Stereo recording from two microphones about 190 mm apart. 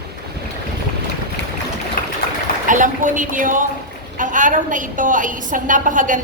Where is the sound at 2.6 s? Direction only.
45° right (ahead or behind).